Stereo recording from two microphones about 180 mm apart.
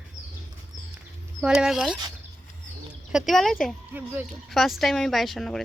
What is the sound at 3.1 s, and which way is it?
Speech, centre (ahead or behind).